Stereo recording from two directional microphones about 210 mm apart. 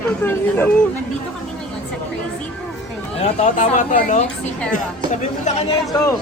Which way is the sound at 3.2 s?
35° left (ahead or behind).